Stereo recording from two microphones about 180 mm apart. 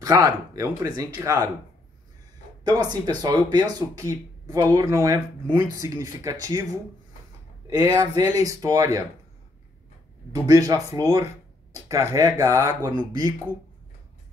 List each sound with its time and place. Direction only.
0.0 s speech: 20° right (ahead or behind)
2.6 s speech: 20° right (ahead or behind)
7.7 s speech: 15° right (ahead or behind)
10.3 s speech: 20° right (ahead or behind)